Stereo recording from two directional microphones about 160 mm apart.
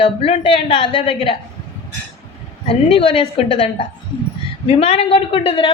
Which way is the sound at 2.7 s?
35° left (ahead or behind).